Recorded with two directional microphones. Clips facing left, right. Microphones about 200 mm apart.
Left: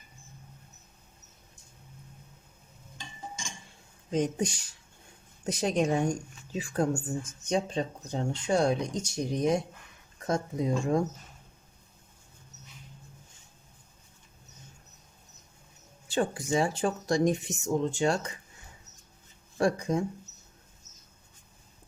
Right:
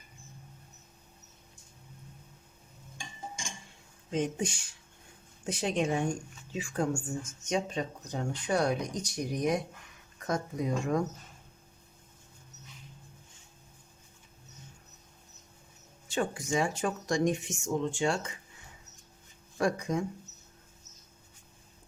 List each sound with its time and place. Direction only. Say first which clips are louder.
4.1 s speech: left 3 dB; 40° left (ahead or behind)
16.0 s speech: left 3 dB; 35° left (ahead or behind)
19.5 s speech: left 3 dB; 30° left (ahead or behind)